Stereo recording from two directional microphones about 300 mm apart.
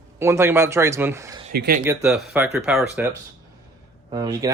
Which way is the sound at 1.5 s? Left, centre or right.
Right.